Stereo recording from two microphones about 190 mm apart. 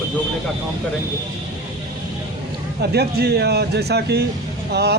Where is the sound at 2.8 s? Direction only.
60° right (ahead or behind).